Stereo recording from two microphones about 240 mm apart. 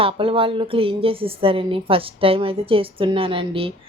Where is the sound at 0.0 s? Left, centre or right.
Right.